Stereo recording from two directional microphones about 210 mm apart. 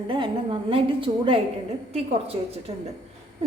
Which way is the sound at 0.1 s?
25° right (ahead or behind).